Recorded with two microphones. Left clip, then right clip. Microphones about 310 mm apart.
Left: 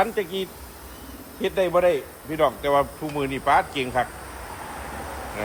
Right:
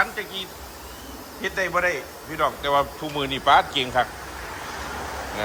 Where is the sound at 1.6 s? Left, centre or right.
Centre.